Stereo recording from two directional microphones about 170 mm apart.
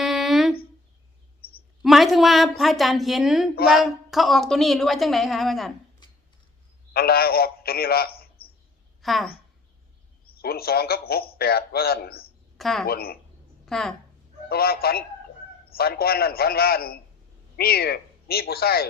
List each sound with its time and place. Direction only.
0.0 s a sound: centre (ahead or behind)
1.8 s a woman's voice: centre (ahead or behind)
6.9 s a man's voice: 65° left (ahead or behind)
9.0 s a woman's voice: centre (ahead or behind)
10.2 s a man's voice: 65° left (ahead or behind)
12.5 s a woman's voice: centre (ahead or behind)
12.8 s a man's voice: 65° left (ahead or behind)
13.7 s a woman's voice: centre (ahead or behind)
14.5 s a man's voice: 65° left (ahead or behind)